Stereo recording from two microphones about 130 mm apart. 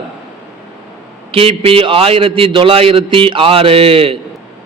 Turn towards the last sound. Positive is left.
turn(degrees=-45)  # may be behind; listen again after turning